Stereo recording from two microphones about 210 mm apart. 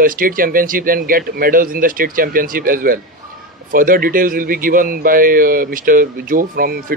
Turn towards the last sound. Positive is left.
turn(degrees=-45)  # may be behind; listen again after turning